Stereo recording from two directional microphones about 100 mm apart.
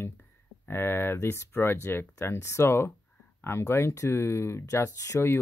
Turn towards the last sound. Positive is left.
turn(degrees=25)  # may be behind; listen again after turning